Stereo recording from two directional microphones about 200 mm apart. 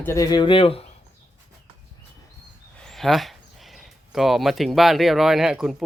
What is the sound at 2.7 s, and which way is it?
Speech, centre (ahead or behind).